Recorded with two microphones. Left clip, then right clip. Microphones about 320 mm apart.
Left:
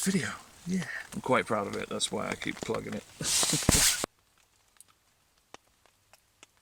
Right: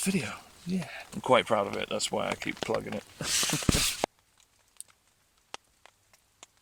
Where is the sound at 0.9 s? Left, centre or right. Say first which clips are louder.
Right 4 dB; centre.